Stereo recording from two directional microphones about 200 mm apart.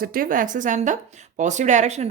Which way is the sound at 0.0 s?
45° right (ahead or behind).